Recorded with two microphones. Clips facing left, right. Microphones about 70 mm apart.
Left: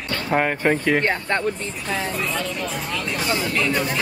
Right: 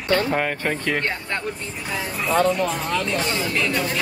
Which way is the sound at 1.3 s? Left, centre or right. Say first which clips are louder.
Left 5 dB; left.